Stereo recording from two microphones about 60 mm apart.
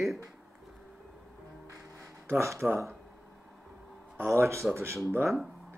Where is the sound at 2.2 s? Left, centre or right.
Right.